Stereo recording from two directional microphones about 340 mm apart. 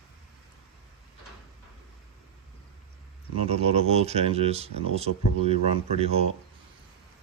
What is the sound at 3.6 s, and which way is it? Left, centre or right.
Speech, centre.